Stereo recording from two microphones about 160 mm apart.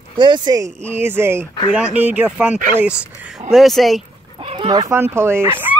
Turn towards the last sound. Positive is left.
turn(degrees=-15)  # may be behind; listen again after turning